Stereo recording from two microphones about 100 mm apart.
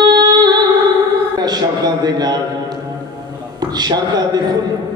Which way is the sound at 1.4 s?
45° right (ahead or behind).